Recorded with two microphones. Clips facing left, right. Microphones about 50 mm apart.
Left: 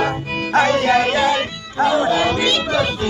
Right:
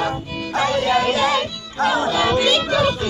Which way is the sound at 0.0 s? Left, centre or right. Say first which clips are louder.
Left 3 dB; left.